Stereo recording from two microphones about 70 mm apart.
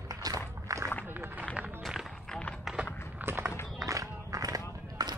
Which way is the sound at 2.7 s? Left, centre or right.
Centre.